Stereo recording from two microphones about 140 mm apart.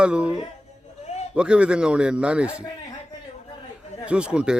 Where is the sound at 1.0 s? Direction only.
50° left (ahead or behind).